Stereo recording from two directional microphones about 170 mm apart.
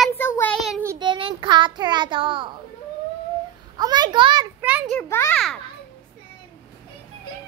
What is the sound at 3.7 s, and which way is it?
Speech, 25° right (ahead or behind).